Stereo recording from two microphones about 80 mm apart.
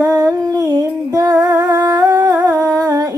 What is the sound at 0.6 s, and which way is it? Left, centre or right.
Humming, right.